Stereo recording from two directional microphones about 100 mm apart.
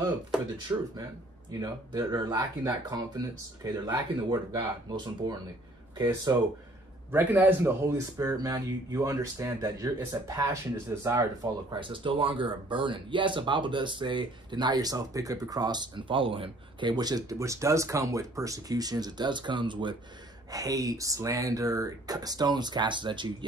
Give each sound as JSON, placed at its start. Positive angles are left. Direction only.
{"t": 0.7, "sound": "speech", "side_deg": -35}
{"t": 7.1, "sound": "speech", "side_deg": -20}
{"t": 11.4, "sound": "speech", "side_deg": -50}
{"t": 16.9, "sound": "speech", "side_deg": -40}
{"t": 20.5, "sound": "speech", "side_deg": -35}